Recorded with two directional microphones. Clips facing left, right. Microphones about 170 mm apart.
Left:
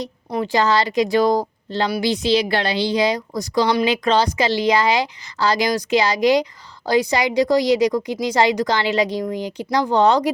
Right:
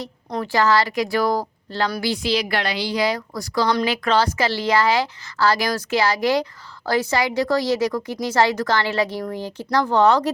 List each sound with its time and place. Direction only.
0.0 s a woman's voice: 15° left (ahead or behind)